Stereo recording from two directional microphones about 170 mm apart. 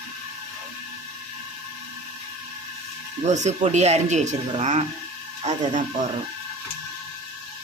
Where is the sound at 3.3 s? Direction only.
45° right (ahead or behind).